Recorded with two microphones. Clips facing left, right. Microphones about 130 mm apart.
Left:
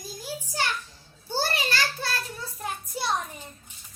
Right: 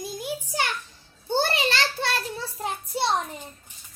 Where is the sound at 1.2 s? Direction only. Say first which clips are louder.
Right 4 dB; 20° right (ahead or behind).